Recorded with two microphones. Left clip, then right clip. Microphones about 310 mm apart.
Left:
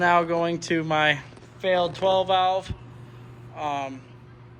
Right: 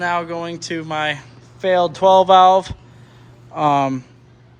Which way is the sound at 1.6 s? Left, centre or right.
Centre.